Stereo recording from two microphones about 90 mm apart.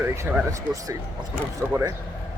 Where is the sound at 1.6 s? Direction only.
15° left (ahead or behind).